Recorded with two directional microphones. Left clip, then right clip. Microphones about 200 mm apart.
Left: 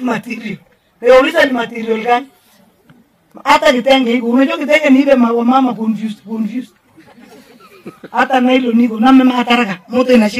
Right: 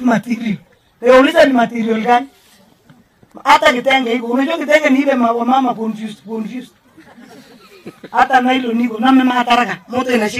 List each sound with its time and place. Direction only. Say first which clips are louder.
0.3 s a man's voice: right 2 dB; 55° left (ahead or behind)
3.5 s a man's voice: left 2 dB; 60° left (ahead or behind)
7.2 s a sound: even; 50° left (ahead or behind)
8.2 s a man's voice: even; 60° left (ahead or behind)